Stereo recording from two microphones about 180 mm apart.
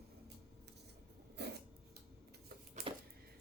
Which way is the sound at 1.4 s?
65° right (ahead or behind).